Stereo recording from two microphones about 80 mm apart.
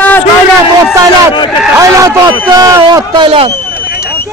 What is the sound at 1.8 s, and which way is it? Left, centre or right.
A man's voice, right.